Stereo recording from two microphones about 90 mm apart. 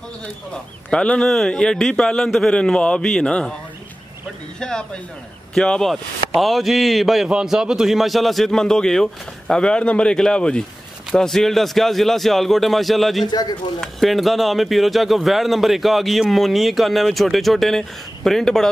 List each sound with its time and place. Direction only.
0.8 s a man's voice: 10° left (ahead or behind)
4.6 s a man's voice: 10° left (ahead or behind)
13.3 s speech: 50° left (ahead or behind)
13.7 s a man's voice: centre (ahead or behind)